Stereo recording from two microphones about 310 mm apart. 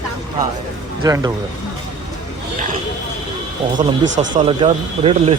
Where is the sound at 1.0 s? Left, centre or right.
Centre.